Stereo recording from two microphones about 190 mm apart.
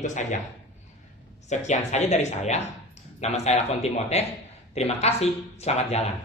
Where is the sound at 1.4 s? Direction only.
40° left (ahead or behind).